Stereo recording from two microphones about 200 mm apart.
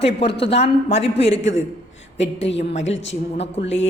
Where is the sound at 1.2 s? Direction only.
65° left (ahead or behind).